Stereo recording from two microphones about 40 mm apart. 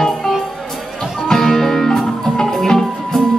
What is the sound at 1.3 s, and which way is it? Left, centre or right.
Music, centre.